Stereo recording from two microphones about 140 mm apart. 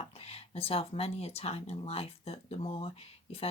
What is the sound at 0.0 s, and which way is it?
Speech, 45° left (ahead or behind).